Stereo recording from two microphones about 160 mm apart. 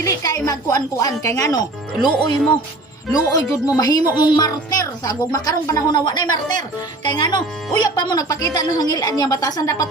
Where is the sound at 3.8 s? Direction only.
25° left (ahead or behind).